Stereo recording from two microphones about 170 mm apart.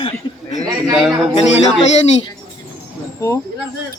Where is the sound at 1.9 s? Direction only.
40° left (ahead or behind).